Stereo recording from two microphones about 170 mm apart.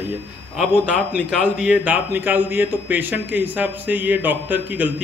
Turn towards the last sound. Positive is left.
turn(degrees=-10)  # may be behind; listen again after turning